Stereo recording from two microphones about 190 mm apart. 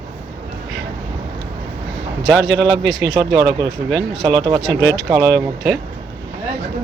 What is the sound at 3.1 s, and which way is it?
Speech, 25° right (ahead or behind).